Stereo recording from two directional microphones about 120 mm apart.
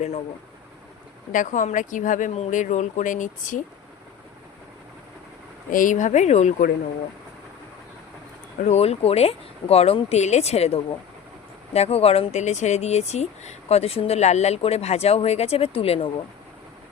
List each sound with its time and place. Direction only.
1.3 s speech: 90° left
5.7 s speech: 90° left
8.6 s speech: 65° left (ahead or behind)